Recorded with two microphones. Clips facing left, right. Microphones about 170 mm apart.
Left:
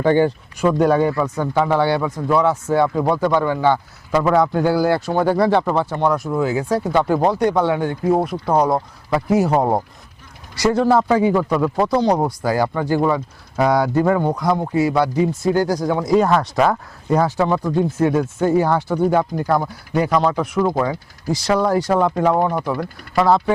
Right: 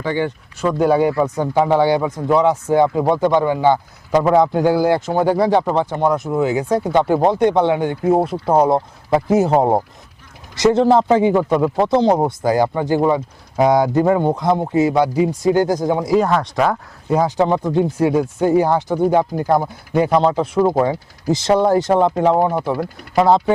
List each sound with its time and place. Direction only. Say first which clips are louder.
0.0 s speech: left 5 dB; 50° left (ahead or behind)
0.5 s speech: even; 10° left (ahead or behind)
0.8 s speech: right 2 dB; 10° right (ahead or behind)
1.1 s a man's voice: right 2 dB; 20° right (ahead or behind)
16.0 s speech: left 3 dB; centre (ahead or behind)
17.1 s a man's voice: right 1 dB; 15° right (ahead or behind)